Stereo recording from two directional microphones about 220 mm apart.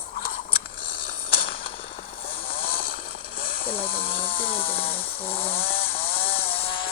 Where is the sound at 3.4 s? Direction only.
45° left (ahead or behind).